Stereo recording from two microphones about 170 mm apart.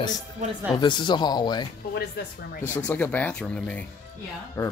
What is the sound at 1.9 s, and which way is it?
Speech, 65° left (ahead or behind).